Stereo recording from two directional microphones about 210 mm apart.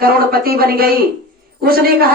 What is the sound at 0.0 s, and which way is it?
Speech, 45° right (ahead or behind).